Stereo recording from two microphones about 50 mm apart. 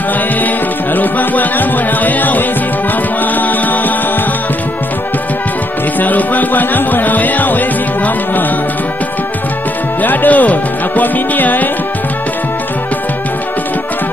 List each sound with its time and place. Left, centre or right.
0.9 s music: left
5.9 s music: left
10.0 s music: left